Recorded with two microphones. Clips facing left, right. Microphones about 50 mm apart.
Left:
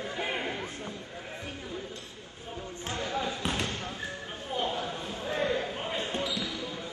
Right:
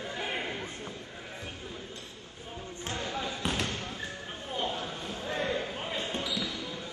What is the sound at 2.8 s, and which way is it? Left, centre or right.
Basketball bounce, centre.